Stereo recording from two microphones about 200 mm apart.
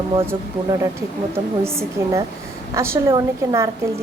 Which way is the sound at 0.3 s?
15° right (ahead or behind).